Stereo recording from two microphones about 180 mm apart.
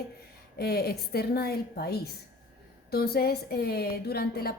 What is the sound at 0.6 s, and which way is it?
A woman's voice, 60° left (ahead or behind).